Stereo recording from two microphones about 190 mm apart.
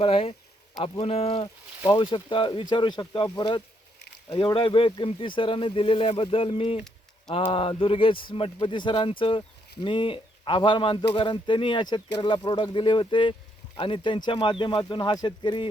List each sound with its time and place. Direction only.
0.0 s speech: 30° left (ahead or behind)